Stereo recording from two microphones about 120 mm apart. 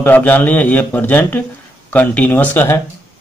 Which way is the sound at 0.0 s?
15° left (ahead or behind).